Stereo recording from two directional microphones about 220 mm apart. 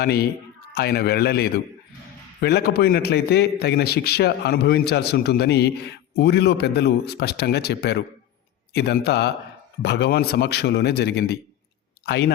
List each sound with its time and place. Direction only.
0.0 s a man's voice: 45° left (ahead or behind)